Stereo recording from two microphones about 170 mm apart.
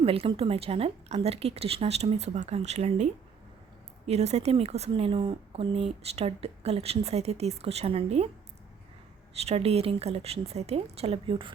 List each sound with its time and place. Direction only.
0.0 s speech: 35° right (ahead or behind)
9.3 s speech: 35° right (ahead or behind)